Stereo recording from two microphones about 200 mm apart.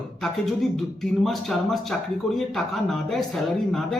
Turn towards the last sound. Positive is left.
turn(degrees=0)  # may be behind; listen again after turning